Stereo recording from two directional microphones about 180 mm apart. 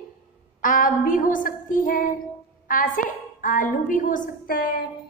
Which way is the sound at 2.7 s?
50° left (ahead or behind).